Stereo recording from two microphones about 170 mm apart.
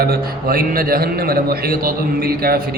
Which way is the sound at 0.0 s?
65° right (ahead or behind).